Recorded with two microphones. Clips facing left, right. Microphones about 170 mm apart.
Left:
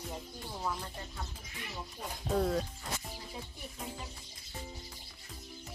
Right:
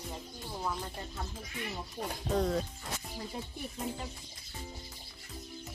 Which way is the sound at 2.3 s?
Centre (ahead or behind).